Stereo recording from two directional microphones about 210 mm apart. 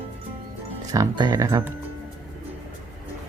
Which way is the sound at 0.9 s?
20° right (ahead or behind).